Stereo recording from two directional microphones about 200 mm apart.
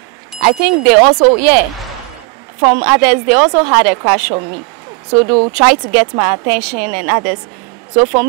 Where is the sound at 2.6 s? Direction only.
10° right (ahead or behind).